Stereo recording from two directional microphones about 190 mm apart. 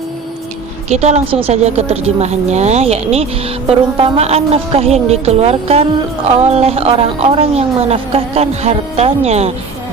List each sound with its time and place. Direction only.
0.9 s a woman's voice: 35° right (ahead or behind)